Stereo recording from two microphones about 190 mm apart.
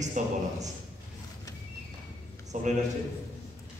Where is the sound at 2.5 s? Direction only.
40° right (ahead or behind).